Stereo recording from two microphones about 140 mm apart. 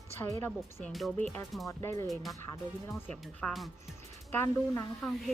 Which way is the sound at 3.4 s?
5° left (ahead or behind).